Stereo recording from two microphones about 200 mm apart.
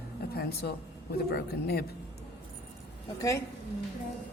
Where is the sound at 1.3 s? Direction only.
50° left (ahead or behind).